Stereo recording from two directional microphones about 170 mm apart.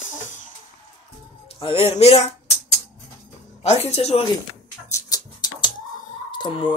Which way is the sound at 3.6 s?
40° left (ahead or behind).